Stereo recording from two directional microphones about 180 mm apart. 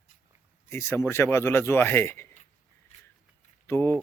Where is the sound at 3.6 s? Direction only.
15° left (ahead or behind).